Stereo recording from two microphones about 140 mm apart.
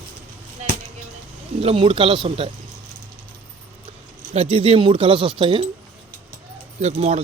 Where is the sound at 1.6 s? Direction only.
45° right (ahead or behind).